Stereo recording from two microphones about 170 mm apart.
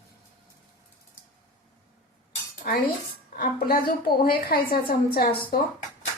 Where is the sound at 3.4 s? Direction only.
60° left (ahead or behind).